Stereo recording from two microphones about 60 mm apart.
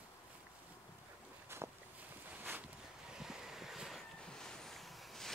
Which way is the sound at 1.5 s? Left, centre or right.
Right.